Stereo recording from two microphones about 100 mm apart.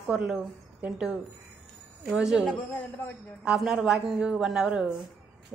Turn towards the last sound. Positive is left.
turn(degrees=-5)  # may be behind; listen again after turning